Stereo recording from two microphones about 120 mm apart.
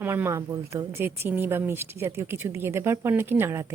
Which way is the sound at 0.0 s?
20° right (ahead or behind).